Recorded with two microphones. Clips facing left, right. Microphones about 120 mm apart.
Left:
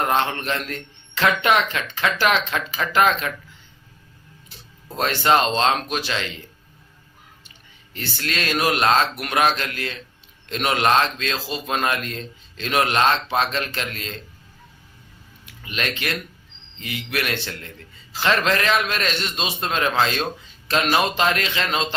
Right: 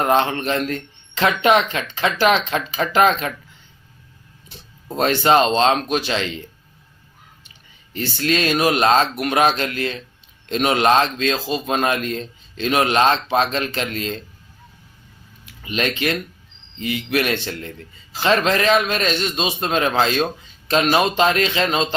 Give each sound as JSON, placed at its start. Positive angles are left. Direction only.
{"t": 0.1, "sound": "speech", "side_deg": -25}
{"t": 4.9, "sound": "speech", "side_deg": -25}
{"t": 7.9, "sound": "speech", "side_deg": -25}
{"t": 15.6, "sound": "speech", "side_deg": -25}